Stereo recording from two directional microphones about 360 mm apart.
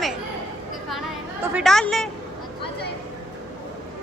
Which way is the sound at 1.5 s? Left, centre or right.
Centre.